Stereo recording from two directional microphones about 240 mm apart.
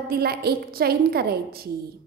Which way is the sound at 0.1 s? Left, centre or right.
Right.